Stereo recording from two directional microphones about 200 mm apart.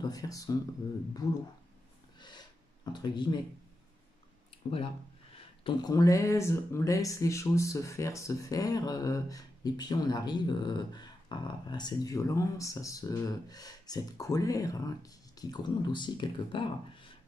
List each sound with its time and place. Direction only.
0.0 s speech: 20° left (ahead or behind)
2.1 s gasp: 20° left (ahead or behind)
4.6 s speech: 30° left (ahead or behind)